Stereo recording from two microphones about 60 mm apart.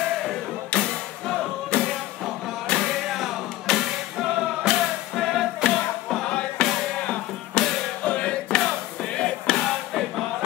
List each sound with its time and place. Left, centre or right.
0.7 s music: centre
6.2 s music: centre